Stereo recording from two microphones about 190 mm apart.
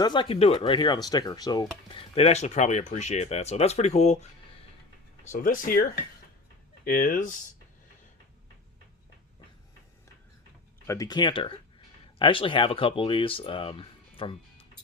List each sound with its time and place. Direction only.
0.0 s speech: 25° left (ahead or behind); by 7.3 s 45° left (ahead or behind)
10.8 s speech: 20° left (ahead or behind)